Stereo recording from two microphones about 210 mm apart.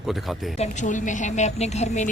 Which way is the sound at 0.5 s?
35° left (ahead or behind).